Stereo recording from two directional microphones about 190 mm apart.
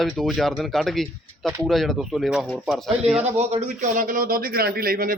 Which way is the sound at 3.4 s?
35° right (ahead or behind).